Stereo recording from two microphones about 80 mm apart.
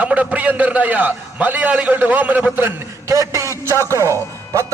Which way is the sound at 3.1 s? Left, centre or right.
Right.